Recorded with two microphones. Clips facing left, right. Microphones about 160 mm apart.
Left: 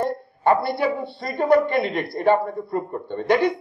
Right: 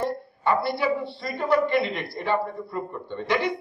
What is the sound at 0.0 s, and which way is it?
A woman's voice, 55° left (ahead or behind).